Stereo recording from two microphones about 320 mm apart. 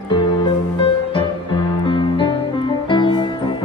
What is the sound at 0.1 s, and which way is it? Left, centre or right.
Music, centre.